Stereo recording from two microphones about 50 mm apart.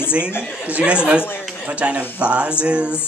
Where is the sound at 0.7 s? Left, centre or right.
Right.